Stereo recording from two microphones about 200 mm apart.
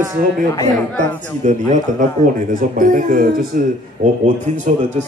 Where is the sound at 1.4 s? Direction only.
35° right (ahead or behind).